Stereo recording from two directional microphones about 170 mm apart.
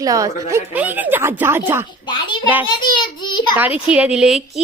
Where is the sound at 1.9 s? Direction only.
25° left (ahead or behind).